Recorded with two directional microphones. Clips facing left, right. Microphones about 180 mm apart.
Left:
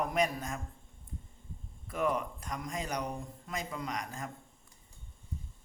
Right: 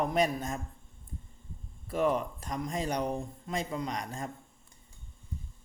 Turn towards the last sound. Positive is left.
turn(degrees=-30)  # may be behind; listen again after turning